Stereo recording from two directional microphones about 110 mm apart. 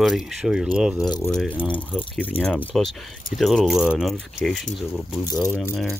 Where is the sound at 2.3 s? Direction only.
60° left (ahead or behind).